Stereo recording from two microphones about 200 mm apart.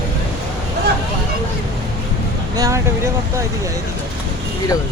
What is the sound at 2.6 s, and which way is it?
Vehicle, 15° right (ahead or behind).